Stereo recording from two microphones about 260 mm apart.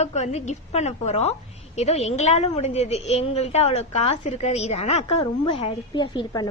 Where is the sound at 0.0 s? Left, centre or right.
Left.